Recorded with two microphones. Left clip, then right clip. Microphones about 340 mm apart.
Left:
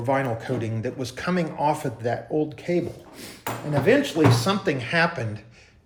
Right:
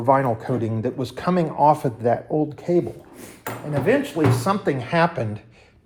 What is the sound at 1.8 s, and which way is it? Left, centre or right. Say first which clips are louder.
Speech: right 6 dB; centre.